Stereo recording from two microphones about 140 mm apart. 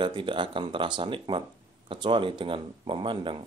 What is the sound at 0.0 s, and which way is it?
Speech, 35° right (ahead or behind).